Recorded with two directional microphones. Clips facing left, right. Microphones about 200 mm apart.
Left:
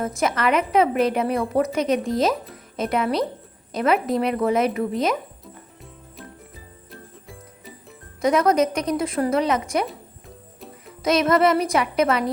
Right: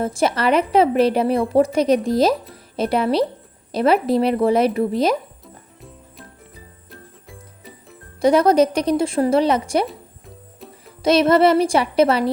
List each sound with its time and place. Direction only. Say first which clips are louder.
0.0 s a woman's voice: right 3 dB; 30° right (ahead or behind)
6.9 s jingle: even; centre (ahead or behind)
8.2 s a woman's voice: right 4 dB; 30° right (ahead or behind)
11.0 s a woman's voice: right 4 dB; 30° right (ahead or behind)